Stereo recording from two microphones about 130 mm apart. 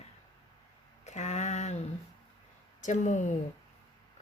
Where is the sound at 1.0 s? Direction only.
60° left (ahead or behind).